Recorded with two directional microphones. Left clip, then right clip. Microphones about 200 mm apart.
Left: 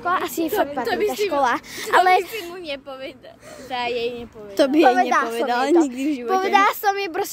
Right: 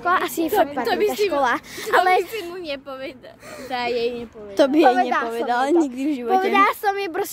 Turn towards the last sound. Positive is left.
turn(degrees=0)  # may be behind; listen again after turning